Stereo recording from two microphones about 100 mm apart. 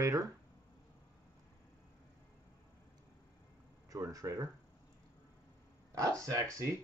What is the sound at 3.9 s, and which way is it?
Speech, 35° right (ahead or behind).